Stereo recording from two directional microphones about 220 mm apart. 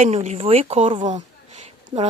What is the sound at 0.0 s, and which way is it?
A woman's voice, 30° right (ahead or behind).